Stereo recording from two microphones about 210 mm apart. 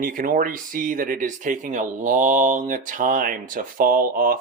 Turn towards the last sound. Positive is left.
turn(degrees=-40)  # may be behind; listen again after turning